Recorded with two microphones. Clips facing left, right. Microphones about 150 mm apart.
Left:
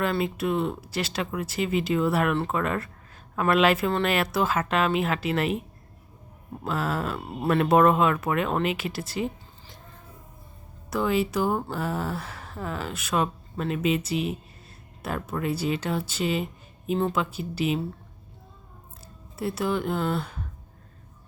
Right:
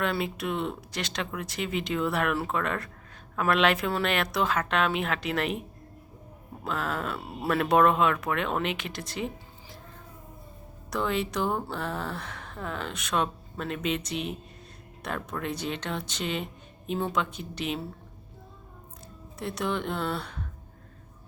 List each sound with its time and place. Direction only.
0.0 s speech: centre (ahead or behind)
6.7 s speech: 5° left (ahead or behind)
10.9 s speech: 5° left (ahead or behind)
19.4 s speech: 5° left (ahead or behind)